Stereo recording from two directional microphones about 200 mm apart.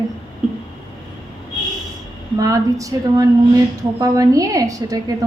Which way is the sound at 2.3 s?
15° right (ahead or behind).